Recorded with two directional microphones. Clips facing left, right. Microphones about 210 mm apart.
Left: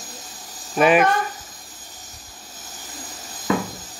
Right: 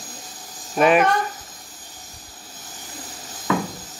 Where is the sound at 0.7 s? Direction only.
5° left (ahead or behind).